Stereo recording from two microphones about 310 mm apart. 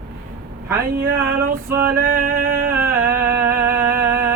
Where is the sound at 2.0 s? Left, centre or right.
Right.